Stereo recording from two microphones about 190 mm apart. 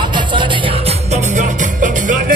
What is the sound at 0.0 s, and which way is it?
Music, 25° right (ahead or behind).